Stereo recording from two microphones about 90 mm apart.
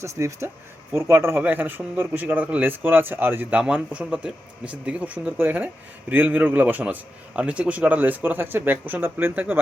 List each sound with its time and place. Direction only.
0.0 s speech: 35° right (ahead or behind)